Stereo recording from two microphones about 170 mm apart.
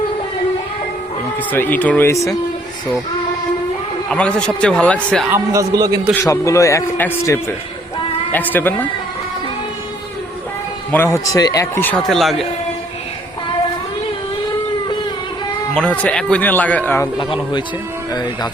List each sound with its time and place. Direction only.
1.4 s speech: 10° left (ahead or behind)
4.1 s a man's voice: 5° left (ahead or behind)
5.3 s a man's voice: 20° right (ahead or behind)
6.2 s speech: 20° left (ahead or behind)
10.9 s speech: 15° left (ahead or behind)
15.7 s speech: 5° left (ahead or behind)